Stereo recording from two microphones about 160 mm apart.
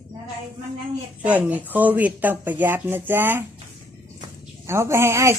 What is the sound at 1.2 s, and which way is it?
Speech, 10° right (ahead or behind).